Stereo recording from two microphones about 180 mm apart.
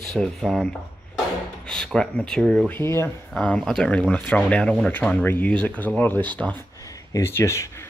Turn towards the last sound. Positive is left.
turn(degrees=15)  # may be behind; listen again after turning